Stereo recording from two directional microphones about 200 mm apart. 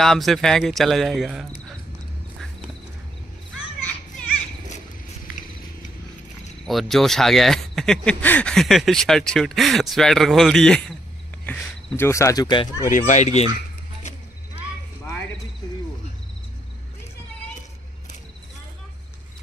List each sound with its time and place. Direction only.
0.0 s speech: centre (ahead or behind)
6.6 s speech: centre (ahead or behind)
12.1 s speech: 15° left (ahead or behind)
12.9 s speech: 40° left (ahead or behind)